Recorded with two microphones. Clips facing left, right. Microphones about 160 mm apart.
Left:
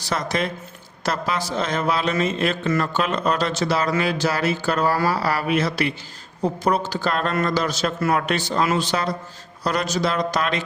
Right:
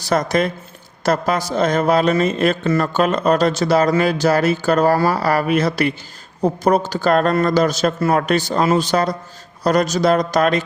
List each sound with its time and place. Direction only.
0.0 s speech: 45° right (ahead or behind)